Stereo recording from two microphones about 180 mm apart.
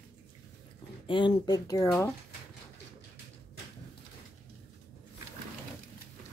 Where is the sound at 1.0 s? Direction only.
25° left (ahead or behind).